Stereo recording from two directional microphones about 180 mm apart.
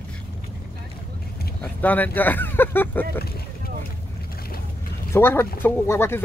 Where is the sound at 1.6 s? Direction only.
10° left (ahead or behind).